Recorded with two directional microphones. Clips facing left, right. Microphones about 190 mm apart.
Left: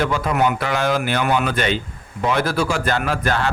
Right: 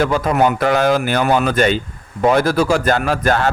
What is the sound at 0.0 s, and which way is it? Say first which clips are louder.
A man's voice: right 4 dB; 40° right (ahead or behind).